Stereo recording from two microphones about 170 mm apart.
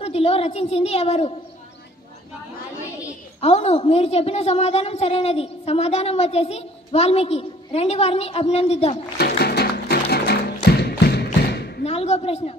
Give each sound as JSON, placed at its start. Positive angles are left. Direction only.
{"t": 0.0, "sound": "a woman's voice", "side_deg": 35}
{"t": 3.3, "sound": "a woman's voice", "side_deg": 35}
{"t": 9.2, "sound": "music", "side_deg": 70}
{"t": 11.8, "sound": "a woman's voice", "side_deg": 35}